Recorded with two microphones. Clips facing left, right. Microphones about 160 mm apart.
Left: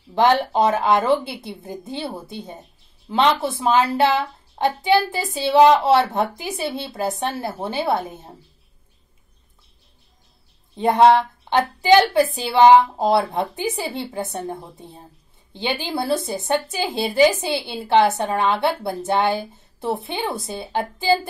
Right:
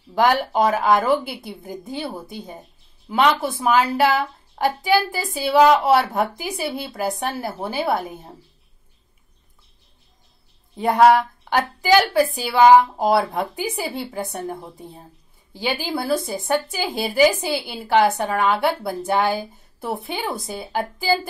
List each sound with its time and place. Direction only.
0.1 s a woman's voice: 25° left (ahead or behind)
10.8 s a woman's voice: 25° left (ahead or behind)